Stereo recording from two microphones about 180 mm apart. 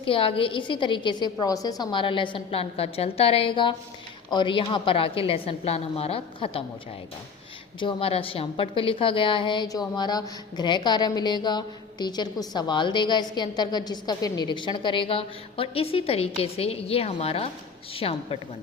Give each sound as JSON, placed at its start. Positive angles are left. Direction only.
{"t": 0.0, "sound": "a woman's voice", "side_deg": 30}
{"t": 7.8, "sound": "a woman's voice", "side_deg": 30}